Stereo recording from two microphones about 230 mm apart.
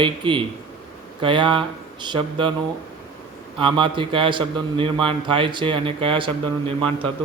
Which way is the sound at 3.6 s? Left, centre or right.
Right.